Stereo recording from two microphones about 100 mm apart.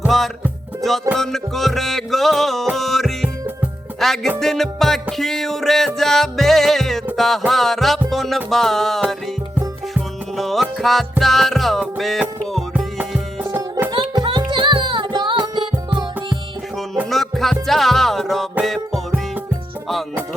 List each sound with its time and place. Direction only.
0.1 s music: centre (ahead or behind)
12.7 s music: 15° right (ahead or behind)
13.9 s music: 50° right (ahead or behind)
17.1 s music: centre (ahead or behind)